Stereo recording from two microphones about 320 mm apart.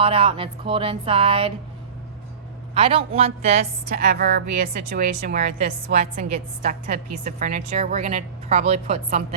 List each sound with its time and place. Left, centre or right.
0.0 s speech: centre
2.7 s a woman's voice: centre